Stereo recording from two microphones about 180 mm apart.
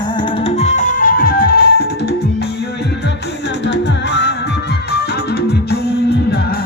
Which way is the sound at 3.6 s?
75° left (ahead or behind).